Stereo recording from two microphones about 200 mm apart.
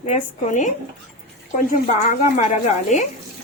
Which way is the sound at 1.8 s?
40° left (ahead or behind).